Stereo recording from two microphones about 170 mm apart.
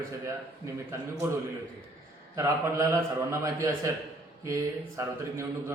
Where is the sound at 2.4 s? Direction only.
15° right (ahead or behind).